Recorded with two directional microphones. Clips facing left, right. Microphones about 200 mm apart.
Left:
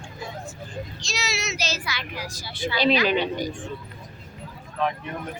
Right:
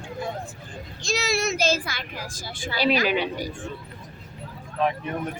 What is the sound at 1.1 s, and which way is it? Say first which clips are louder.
Speech: right 8 dB; 55° right (ahead or behind).